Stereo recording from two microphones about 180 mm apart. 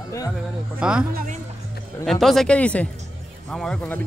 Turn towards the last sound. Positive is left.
turn(degrees=5)  # may be behind; listen again after turning